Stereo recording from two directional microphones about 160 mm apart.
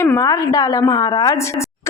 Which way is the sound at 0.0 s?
15° left (ahead or behind).